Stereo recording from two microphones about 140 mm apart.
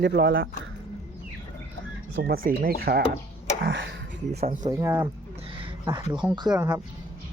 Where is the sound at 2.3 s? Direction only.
90° right.